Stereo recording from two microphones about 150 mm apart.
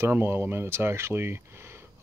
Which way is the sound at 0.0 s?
15° right (ahead or behind).